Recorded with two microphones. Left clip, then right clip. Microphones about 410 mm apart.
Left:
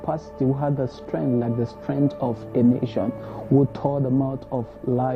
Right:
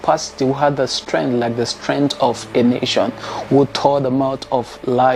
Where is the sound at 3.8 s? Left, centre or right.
Centre.